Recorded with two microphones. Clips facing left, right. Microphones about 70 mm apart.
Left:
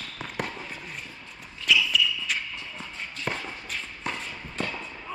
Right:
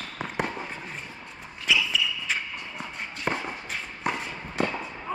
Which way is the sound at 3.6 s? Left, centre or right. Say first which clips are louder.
Right 3 dB; centre.